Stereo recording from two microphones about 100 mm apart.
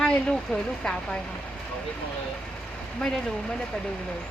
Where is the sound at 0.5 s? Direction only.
5° left (ahead or behind).